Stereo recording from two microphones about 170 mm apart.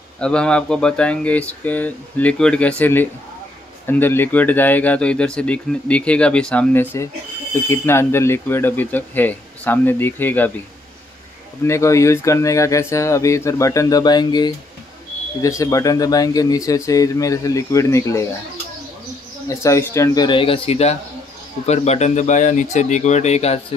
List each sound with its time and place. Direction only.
0.2 s speech: 5° left (ahead or behind)
11.6 s speech: 15° left (ahead or behind)
19.4 s speech: 15° left (ahead or behind)
20.2 s speech: 30° left (ahead or behind)